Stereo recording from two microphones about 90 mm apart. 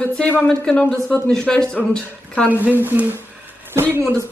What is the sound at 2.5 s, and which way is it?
Speech, 20° right (ahead or behind).